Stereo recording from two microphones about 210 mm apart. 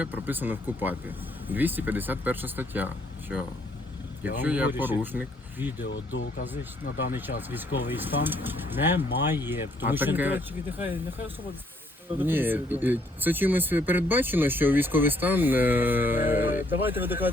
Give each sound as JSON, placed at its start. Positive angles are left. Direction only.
{"t": 0.0, "sound": "speech", "side_deg": -10}
{"t": 5.8, "sound": "speech", "side_deg": 55}
{"t": 7.1, "sound": "speech", "side_deg": -10}
{"t": 12.2, "sound": "speech", "side_deg": -10}